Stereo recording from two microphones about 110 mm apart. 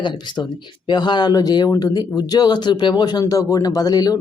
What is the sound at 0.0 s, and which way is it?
A man's voice, 45° left (ahead or behind).